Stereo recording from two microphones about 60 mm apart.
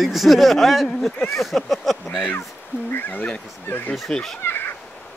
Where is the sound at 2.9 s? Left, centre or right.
Left.